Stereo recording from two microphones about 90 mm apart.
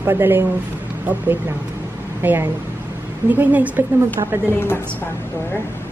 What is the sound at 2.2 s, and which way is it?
A woman's voice, 20° right (ahead or behind).